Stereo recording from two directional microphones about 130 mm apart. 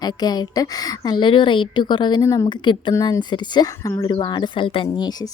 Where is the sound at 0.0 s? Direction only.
30° left (ahead or behind).